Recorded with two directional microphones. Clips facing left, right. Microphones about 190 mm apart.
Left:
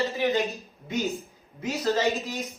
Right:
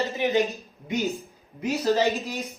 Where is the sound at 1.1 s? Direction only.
Centre (ahead or behind).